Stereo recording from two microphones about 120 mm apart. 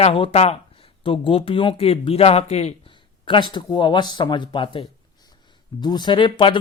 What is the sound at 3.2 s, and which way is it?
Speech, 45° left (ahead or behind).